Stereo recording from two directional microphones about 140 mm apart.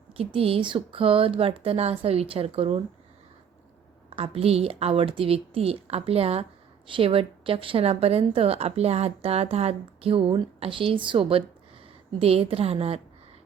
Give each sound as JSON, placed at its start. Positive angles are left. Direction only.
{"t": 0.3, "sound": "a woman's voice", "side_deg": -40}
{"t": 4.1, "sound": "a woman's voice", "side_deg": -45}